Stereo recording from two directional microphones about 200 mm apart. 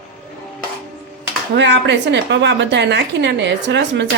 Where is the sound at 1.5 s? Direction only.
60° right (ahead or behind).